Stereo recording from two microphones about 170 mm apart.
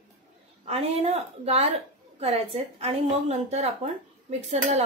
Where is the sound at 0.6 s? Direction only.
35° right (ahead or behind).